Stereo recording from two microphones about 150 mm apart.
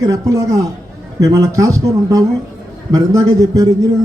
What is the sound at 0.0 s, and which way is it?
A man's voice, 25° right (ahead or behind).